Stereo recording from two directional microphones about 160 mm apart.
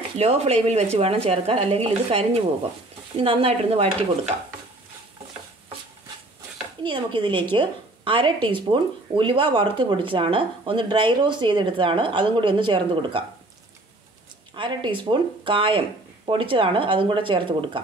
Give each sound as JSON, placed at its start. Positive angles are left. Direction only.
{"t": 0.2, "sound": "speech", "side_deg": -40}
{"t": 6.8, "sound": "speech", "side_deg": -30}
{"t": 14.5, "sound": "speech", "side_deg": -30}